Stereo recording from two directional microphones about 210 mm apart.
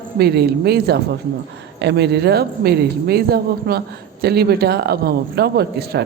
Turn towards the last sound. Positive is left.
turn(degrees=-50)  # may be behind; listen again after turning